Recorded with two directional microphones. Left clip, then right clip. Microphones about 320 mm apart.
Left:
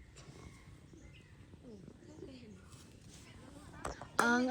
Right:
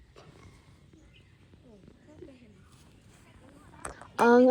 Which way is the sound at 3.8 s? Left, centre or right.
Left.